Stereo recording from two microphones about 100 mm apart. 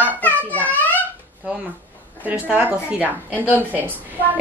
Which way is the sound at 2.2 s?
15° right (ahead or behind).